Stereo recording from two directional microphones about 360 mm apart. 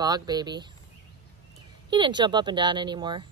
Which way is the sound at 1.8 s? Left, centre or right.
Centre.